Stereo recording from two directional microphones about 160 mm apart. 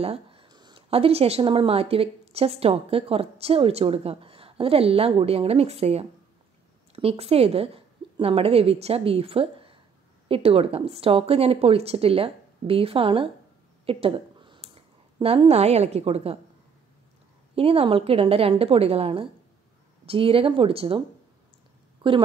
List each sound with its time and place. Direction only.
0.0 s a woman's voice: 35° right (ahead or behind)
17.6 s speech: 35° right (ahead or behind)
22.0 s speech: 30° right (ahead or behind)